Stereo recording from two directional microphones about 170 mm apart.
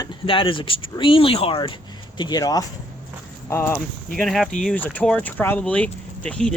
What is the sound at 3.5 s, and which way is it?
Speech, 10° left (ahead or behind).